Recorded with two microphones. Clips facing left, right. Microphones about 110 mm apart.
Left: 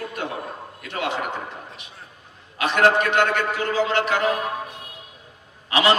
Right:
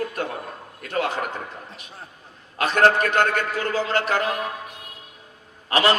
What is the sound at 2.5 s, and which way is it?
A man's voice, 40° right (ahead or behind).